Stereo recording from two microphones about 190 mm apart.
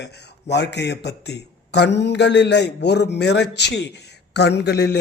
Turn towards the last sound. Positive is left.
turn(degrees=60)  # may be behind; listen again after turning